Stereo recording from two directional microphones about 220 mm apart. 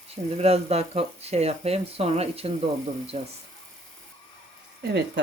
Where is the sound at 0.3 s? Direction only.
30° right (ahead or behind).